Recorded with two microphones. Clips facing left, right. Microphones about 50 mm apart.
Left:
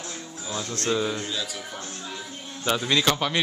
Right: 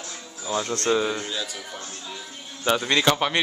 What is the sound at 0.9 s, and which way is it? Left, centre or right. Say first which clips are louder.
Speech: right 2 dB; centre.